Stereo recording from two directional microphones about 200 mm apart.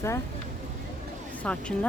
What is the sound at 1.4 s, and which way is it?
Speech, 5° left (ahead or behind).